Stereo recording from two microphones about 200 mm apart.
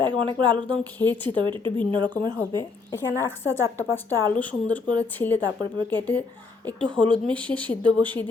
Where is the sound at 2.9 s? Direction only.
10° left (ahead or behind).